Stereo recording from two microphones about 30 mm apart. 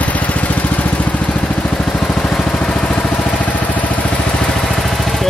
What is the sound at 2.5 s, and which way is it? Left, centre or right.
Vehicle, left.